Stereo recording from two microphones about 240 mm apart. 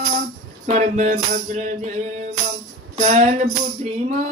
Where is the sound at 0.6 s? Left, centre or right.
Right.